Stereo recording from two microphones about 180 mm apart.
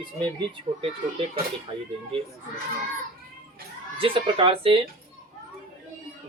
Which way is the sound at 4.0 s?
30° right (ahead or behind).